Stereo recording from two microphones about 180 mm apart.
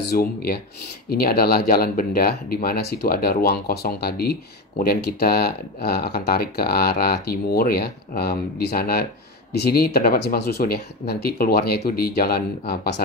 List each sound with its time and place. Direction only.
0.1 s speech: 60° left (ahead or behind)